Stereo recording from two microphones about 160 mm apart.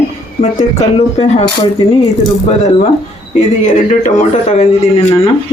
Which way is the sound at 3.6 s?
50° left (ahead or behind).